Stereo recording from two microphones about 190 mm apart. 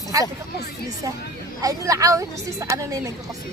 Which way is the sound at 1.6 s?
20° right (ahead or behind).